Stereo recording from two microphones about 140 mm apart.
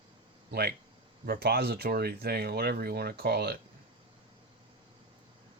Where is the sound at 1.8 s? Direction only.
90° right.